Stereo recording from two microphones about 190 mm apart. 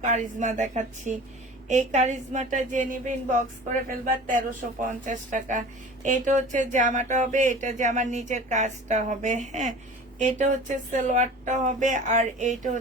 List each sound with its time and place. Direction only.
0.0 s speech: 40° right (ahead or behind)